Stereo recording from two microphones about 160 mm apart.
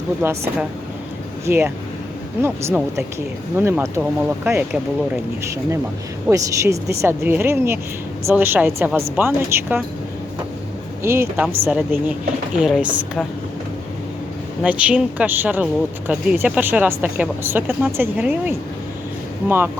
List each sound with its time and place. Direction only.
0.2 s speech: 15° right (ahead or behind)
6.3 s speech: 20° right (ahead or behind)
11.0 s speech: 15° right (ahead or behind)
14.6 s speech: 10° right (ahead or behind)